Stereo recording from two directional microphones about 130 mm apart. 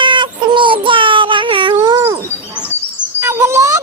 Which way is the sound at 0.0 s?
40° right (ahead or behind).